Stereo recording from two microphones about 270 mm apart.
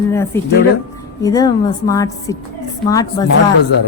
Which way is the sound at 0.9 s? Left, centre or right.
Centre.